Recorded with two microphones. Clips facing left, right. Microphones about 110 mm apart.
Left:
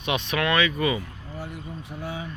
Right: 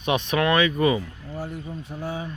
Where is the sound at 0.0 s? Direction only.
40° right (ahead or behind).